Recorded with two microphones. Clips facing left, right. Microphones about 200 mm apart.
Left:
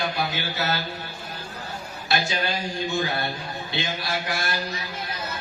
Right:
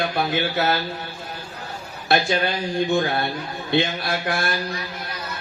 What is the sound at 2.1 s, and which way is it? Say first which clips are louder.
Speech: right 6 dB; 55° right (ahead or behind).